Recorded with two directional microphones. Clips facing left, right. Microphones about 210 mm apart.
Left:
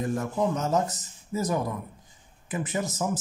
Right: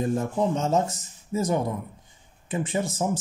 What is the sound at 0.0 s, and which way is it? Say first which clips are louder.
Speech: right 2 dB; 25° right (ahead or behind).